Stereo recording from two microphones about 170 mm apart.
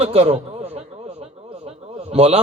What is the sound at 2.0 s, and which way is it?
Speech, 35° right (ahead or behind).